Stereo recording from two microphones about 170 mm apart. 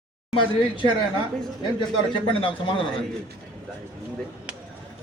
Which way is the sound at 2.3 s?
30° left (ahead or behind).